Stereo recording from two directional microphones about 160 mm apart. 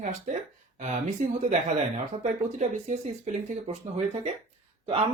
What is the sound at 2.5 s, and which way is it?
Speech, 45° right (ahead or behind).